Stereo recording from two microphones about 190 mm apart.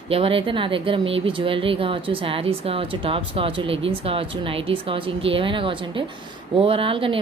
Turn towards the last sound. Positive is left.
turn(degrees=-30)  # may be behind; listen again after turning